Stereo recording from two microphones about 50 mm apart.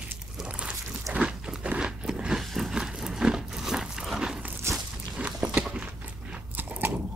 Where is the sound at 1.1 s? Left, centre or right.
Right.